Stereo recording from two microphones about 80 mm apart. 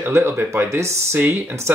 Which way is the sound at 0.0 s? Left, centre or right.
Right.